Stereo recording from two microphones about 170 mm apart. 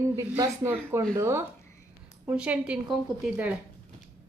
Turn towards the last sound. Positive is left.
turn(degrees=-5)  # may be behind; listen again after turning